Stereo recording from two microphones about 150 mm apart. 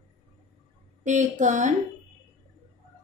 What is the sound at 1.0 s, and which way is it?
Speech, 55° right (ahead or behind).